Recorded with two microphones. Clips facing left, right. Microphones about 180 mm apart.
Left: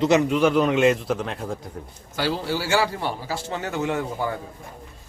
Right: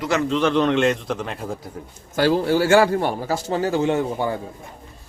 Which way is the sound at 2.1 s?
50° right (ahead or behind).